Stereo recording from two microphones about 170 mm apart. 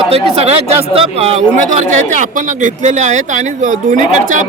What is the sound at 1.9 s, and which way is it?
Speech, 45° right (ahead or behind).